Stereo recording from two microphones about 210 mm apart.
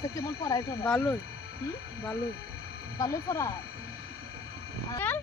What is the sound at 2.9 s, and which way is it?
Speech, 15° left (ahead or behind).